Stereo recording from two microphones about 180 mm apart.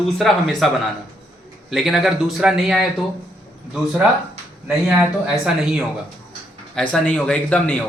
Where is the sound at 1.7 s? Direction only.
Centre (ahead or behind).